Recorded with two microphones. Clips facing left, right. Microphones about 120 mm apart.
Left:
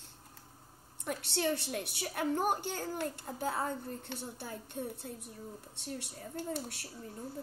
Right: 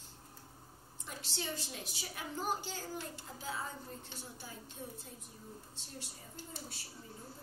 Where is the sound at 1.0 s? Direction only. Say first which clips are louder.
Left 10 dB; 65° left (ahead or behind).